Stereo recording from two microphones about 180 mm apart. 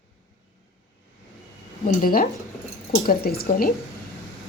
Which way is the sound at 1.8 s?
55° left (ahead or behind).